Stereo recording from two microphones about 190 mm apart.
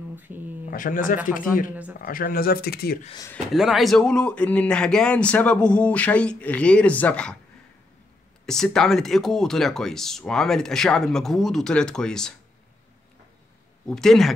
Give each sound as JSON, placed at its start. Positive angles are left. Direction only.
{"t": 0.1, "sound": "speech", "side_deg": -10}
{"t": 0.7, "sound": "speech", "side_deg": 45}
{"t": 3.5, "sound": "speech", "side_deg": 0}
{"t": 8.5, "sound": "speech", "side_deg": 5}
{"t": 13.8, "sound": "speech", "side_deg": 0}